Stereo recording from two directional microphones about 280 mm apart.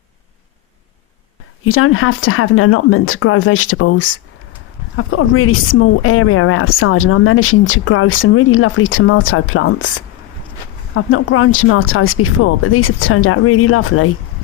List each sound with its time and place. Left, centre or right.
1.6 s speech: left